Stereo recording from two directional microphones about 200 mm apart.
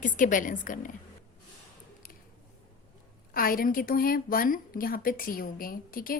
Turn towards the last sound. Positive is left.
turn(degrees=45)  # may be behind; listen again after turning